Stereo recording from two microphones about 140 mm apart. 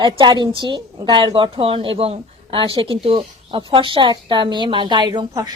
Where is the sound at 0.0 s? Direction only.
35° right (ahead or behind).